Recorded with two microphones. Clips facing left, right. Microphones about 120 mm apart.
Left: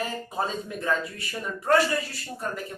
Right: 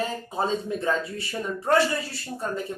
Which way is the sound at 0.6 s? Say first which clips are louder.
Right 2 dB; 30° right (ahead or behind).